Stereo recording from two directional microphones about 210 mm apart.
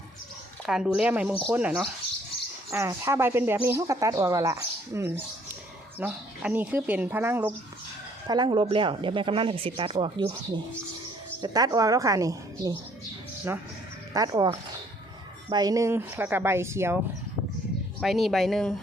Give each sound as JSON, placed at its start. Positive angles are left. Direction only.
{"t": 0.6, "sound": "speech", "side_deg": 0}
{"t": 8.3, "sound": "speech", "side_deg": -20}
{"t": 14.1, "sound": "speech", "side_deg": -20}
{"t": 18.0, "sound": "speech", "side_deg": 0}